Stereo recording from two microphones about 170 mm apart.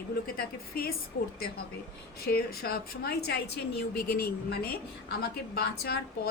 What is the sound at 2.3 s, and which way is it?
A woman's voice, 65° left (ahead or behind).